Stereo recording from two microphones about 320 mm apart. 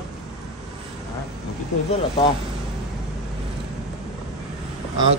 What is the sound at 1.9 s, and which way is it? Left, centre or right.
Speech, centre.